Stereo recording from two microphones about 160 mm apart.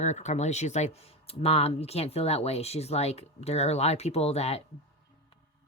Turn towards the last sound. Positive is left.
turn(degrees=40)  # may be behind; listen again after turning